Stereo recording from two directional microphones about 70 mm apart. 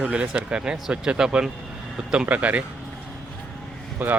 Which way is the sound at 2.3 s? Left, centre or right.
Right.